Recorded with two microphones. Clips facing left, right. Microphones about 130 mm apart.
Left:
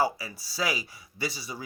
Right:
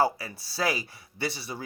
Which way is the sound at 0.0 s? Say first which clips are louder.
Right 2 dB; 50° right (ahead or behind).